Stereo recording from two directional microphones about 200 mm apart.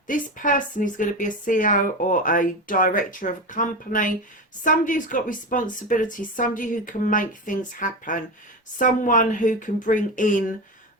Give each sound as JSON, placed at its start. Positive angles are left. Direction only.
{"t": 0.1, "sound": "a woman's voice", "side_deg": 40}